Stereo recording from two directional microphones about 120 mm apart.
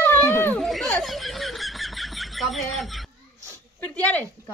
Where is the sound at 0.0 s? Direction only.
15° left (ahead or behind).